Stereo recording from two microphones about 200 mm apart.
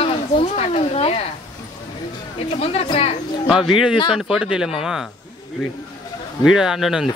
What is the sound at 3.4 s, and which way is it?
Speech, centre (ahead or behind).